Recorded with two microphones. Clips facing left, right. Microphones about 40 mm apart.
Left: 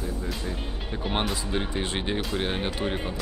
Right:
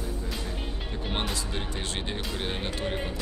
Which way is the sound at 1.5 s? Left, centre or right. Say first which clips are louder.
Left 5 dB; centre.